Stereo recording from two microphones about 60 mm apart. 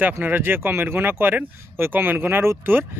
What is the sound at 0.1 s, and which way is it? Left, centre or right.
Speech, right.